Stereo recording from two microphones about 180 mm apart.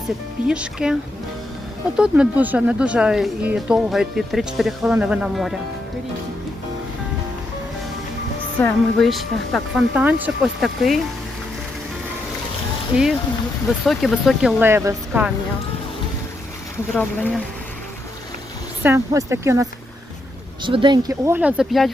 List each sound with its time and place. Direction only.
0.4 s speech: 5° right (ahead or behind)
2.0 s speech: 5° right (ahead or behind)
8.5 s speech: 5° left (ahead or behind)
13.8 s speech: centre (ahead or behind)
14.6 s speech: 15° right (ahead or behind)
16.9 s speech: 10° left (ahead or behind)
18.8 s speech: 15° right (ahead or behind)
20.6 s speech: 25° right (ahead or behind); by 21.9 s centre (ahead or behind)